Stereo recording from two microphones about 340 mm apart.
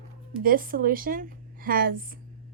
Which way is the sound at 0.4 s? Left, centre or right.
Right.